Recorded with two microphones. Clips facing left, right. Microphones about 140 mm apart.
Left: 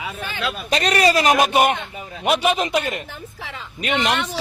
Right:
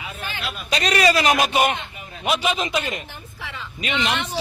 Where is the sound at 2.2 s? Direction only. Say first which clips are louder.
Left 3 dB; 55° left (ahead or behind).